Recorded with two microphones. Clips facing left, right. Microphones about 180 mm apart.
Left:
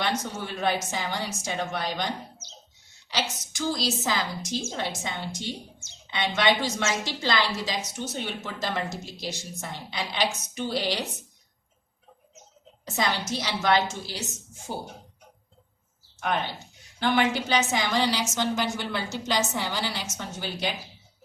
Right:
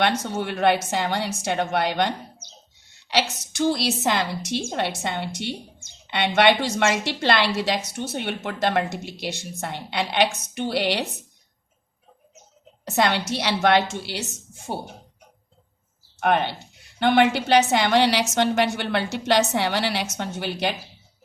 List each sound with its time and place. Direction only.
0.0 s a woman's voice: 65° right (ahead or behind)
12.8 s a woman's voice: 70° right (ahead or behind)
16.2 s a woman's voice: 65° right (ahead or behind)